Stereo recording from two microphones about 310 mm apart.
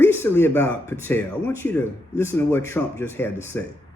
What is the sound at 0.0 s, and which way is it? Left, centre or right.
Speech, centre.